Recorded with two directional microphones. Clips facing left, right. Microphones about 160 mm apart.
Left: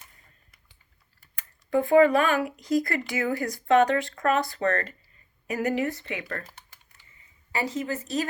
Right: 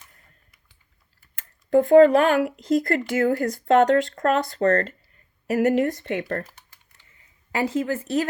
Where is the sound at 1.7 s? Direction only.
45° right (ahead or behind).